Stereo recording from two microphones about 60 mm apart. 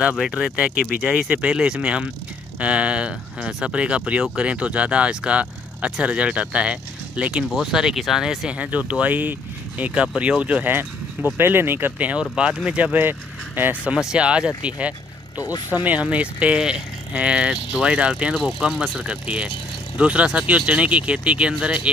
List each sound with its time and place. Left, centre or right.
0.3 s speech: centre
7.4 s speech: centre
8.5 s speech: right
10.6 s speech: right
12.0 s speech: centre
13.6 s speech: right
13.9 s speech: centre
18.3 s speech: centre